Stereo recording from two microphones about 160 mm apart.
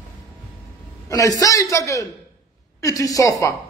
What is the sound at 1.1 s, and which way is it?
A man's voice, 20° left (ahead or behind).